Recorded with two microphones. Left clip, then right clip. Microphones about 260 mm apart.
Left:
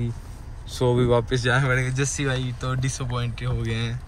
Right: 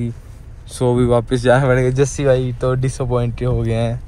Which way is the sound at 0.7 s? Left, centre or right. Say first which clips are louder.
Right 5 dB; centre.